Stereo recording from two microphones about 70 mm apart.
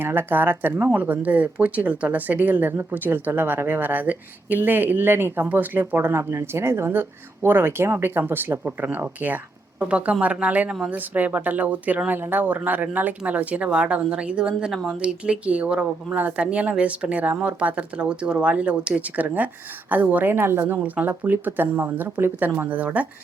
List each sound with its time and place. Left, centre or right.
0.0 s speech: right
20.3 s speech: right